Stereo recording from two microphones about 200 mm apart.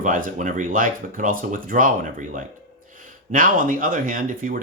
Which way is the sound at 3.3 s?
45° right (ahead or behind).